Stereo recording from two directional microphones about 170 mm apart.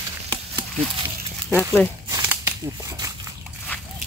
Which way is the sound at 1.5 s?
10° left (ahead or behind).